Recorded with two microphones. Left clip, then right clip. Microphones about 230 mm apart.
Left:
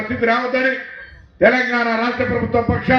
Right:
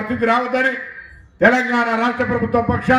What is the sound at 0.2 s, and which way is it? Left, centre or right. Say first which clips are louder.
A man's voice: even; right.